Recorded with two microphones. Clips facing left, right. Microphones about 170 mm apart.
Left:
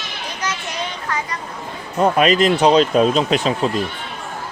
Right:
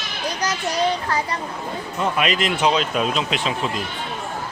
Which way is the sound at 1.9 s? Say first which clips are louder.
Left 7 dB; 40° left (ahead or behind).